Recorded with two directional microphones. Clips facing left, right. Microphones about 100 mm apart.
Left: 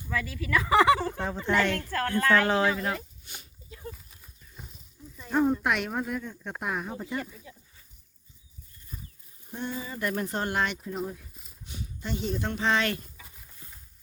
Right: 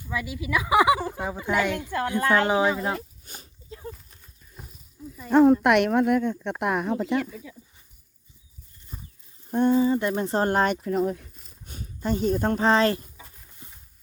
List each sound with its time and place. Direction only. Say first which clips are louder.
0.1 s speech: right 1 dB; 15° right (ahead or behind)
2.7 s a sound: right 3 dB; 35° right (ahead or behind)
3.9 s horse: even; centre (ahead or behind)
5.3 s speech: right 8 dB; 85° right
5.6 s speech: right 9 dB; 65° right (ahead or behind); by 7.4 s 85° right
8.9 s livestock: right 1 dB; 30° right (ahead or behind)
9.5 s speech: right 14 dB; 55° right (ahead or behind)
9.7 s speech: right 10 dB; 30° right (ahead or behind)
10.8 s speech: right 9 dB; 90° right
11.6 s speech: right 8 dB; 45° right (ahead or behind); by 13.2 s 30° right (ahead or behind)
13.6 s a sound: right 3 dB; 20° right (ahead or behind)